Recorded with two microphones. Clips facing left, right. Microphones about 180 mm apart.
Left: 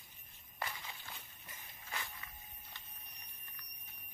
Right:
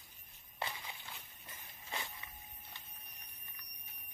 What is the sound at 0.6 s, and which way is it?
Walk, 25° right (ahead or behind).